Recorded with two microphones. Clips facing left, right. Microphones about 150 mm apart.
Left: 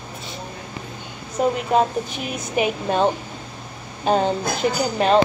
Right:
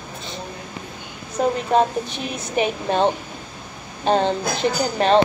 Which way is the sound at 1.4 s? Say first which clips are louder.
Even; 5° left (ahead or behind).